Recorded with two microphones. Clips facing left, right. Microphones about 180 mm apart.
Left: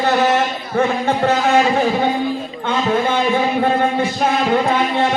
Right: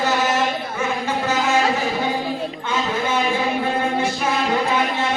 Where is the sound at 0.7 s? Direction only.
60° left (ahead or behind).